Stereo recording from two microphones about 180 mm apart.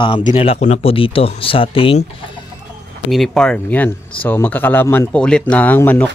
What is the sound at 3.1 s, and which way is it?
Speech, centre (ahead or behind).